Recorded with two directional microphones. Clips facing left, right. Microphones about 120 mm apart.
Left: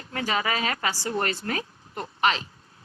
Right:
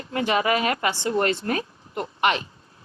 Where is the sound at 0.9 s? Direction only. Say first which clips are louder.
Right 5 dB; 25° right (ahead or behind).